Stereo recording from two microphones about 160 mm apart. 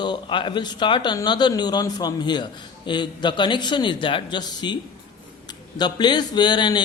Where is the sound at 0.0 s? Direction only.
30° left (ahead or behind).